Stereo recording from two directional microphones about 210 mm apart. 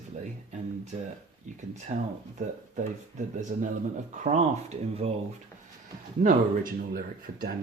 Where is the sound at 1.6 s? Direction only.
35° right (ahead or behind).